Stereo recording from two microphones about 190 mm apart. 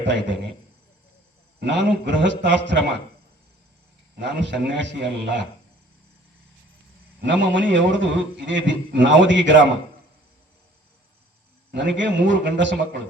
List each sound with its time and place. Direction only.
1.5 s a man's voice: 65° right (ahead or behind)
4.2 s a man's voice: 65° right (ahead or behind)
7.2 s a man's voice: 70° right (ahead or behind)
11.7 s a man's voice: 70° right (ahead or behind)